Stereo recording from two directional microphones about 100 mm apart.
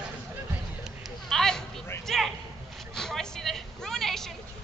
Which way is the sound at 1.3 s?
5° left (ahead or behind).